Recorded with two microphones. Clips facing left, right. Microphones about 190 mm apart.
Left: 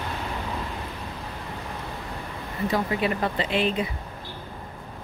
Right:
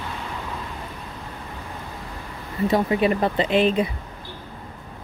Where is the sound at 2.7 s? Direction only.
25° right (ahead or behind).